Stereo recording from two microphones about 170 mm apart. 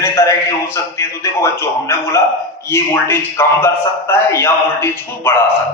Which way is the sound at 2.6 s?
15° left (ahead or behind).